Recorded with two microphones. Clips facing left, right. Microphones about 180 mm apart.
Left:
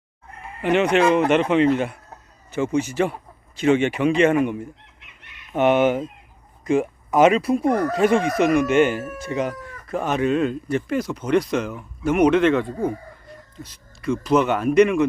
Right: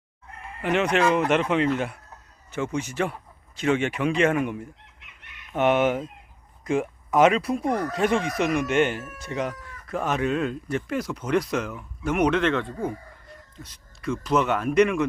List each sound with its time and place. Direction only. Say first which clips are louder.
0.6 s speech: left 4 dB; centre (ahead or behind)
7.6 s speech: left 5 dB; 50° left (ahead or behind)
7.9 s speech: left 5 dB; centre (ahead or behind)